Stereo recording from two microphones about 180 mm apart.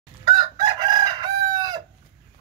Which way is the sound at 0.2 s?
20° right (ahead or behind).